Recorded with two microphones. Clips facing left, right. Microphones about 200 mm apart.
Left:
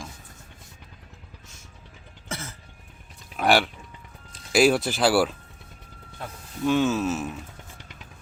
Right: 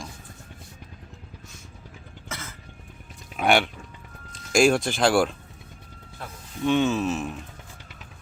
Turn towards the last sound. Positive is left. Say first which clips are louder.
# even
turn(degrees=5)  # may be behind; listen again after turning